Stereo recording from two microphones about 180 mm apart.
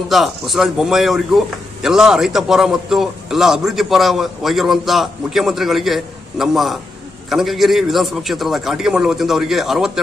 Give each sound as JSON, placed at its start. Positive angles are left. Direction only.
{"t": 0.1, "sound": "speech", "side_deg": 0}